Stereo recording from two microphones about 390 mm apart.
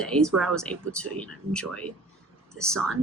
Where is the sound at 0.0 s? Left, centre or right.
Centre.